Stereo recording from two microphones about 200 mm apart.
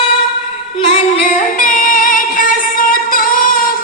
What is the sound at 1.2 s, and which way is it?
Music, 45° left (ahead or behind).